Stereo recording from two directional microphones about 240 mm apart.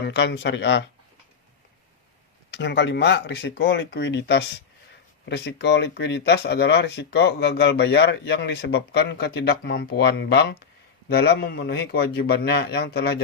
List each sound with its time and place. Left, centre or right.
0.1 s speech: left
2.5 s speech: left